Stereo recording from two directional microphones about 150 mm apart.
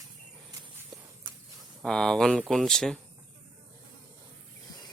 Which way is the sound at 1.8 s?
5° left (ahead or behind).